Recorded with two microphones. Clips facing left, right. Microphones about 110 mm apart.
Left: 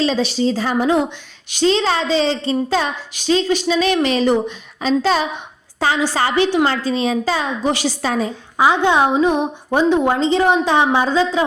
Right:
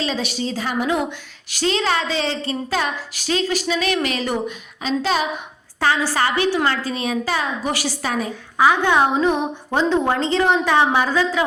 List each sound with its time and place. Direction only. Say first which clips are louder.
0.0 s a woman's voice: left 7 dB; 30° left (ahead or behind)
5.8 s a woman's voice: left 1 dB; 20° left (ahead or behind)